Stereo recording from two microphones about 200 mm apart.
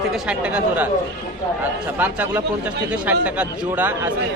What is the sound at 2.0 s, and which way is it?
A man's voice, 10° right (ahead or behind).